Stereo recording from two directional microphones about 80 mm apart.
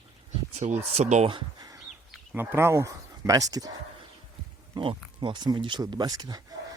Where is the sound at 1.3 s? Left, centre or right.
Right.